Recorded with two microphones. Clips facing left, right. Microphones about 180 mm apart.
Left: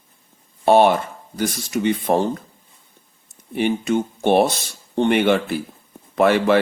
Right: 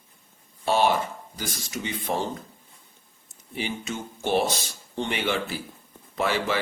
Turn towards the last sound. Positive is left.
turn(degrees=60)  # may be behind; listen again after turning